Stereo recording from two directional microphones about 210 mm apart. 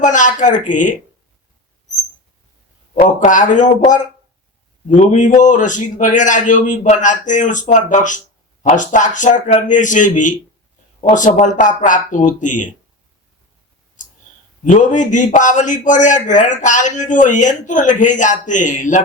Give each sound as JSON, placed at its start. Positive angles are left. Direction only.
{"t": 0.0, "sound": "a man's voice", "side_deg": 35}
{"t": 2.9, "sound": "a man's voice", "side_deg": 35}
{"t": 4.9, "sound": "a man's voice", "side_deg": 35}
{"t": 14.6, "sound": "a man's voice", "side_deg": 35}